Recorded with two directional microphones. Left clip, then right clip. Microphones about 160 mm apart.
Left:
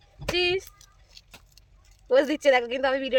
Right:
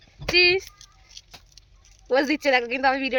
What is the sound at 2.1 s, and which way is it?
Speech, 25° right (ahead or behind).